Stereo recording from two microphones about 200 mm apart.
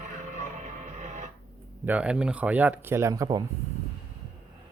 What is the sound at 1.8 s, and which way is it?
Speech, 5° right (ahead or behind).